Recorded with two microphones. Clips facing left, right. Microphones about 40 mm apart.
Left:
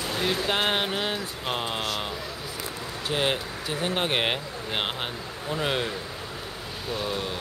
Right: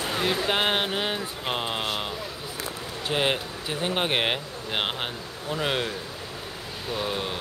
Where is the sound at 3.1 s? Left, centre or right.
Centre.